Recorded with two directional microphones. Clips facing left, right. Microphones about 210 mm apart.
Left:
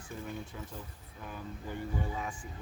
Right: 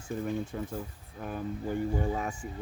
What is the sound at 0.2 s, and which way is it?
Speech, 50° right (ahead or behind).